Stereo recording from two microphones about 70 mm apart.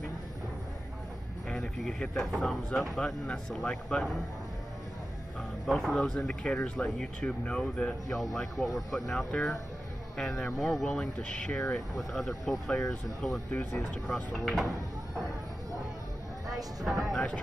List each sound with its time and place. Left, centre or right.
1.5 s speech: centre
3.3 s speech: centre
5.8 s speech: centre
8.2 s speech: centre
10.6 s speech: centre
12.0 s speech: centre
13.5 s speech: centre
16.8 s speech: centre